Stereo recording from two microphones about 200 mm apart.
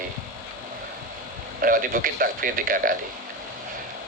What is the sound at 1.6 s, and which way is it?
A man's voice, 45° right (ahead or behind).